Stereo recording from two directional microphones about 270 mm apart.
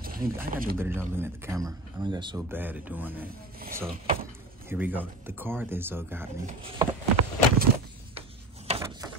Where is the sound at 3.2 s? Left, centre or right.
Right.